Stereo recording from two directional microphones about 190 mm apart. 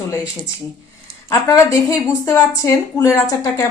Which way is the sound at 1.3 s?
15° left (ahead or behind).